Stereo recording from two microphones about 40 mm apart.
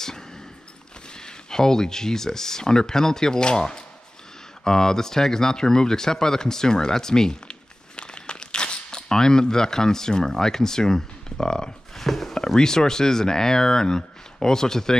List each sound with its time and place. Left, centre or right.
1.1 s speech: centre
7.4 s crumpling: left
12.1 s speech: centre